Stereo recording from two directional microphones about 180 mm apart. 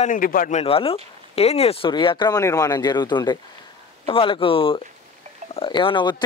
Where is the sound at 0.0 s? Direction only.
50° left (ahead or behind).